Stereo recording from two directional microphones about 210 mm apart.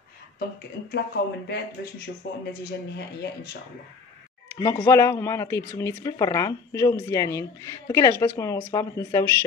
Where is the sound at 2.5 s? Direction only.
50° left (ahead or behind).